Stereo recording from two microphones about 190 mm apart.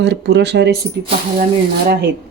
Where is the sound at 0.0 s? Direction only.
65° right (ahead or behind).